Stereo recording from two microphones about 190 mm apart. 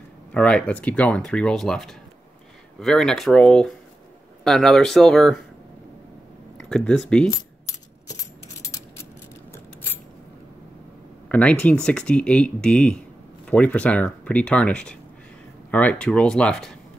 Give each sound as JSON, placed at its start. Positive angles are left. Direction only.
{"t": 0.3, "sound": "speech", "side_deg": 5}
{"t": 6.6, "sound": "speech", "side_deg": 5}
{"t": 7.6, "sound": "coin", "side_deg": 15}
{"t": 11.2, "sound": "speech", "side_deg": 5}